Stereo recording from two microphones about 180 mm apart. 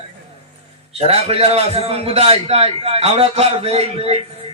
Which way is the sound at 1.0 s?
35° right (ahead or behind).